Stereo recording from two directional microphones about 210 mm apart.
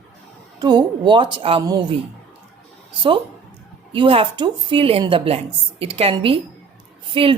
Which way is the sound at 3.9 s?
25° right (ahead or behind).